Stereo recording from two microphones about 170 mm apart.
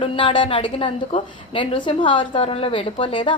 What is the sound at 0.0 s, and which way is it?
A woman's voice, 30° left (ahead or behind).